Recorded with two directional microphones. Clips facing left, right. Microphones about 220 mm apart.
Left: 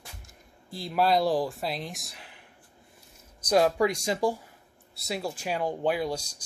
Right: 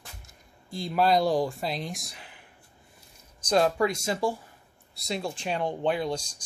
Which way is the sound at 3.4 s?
10° left (ahead or behind).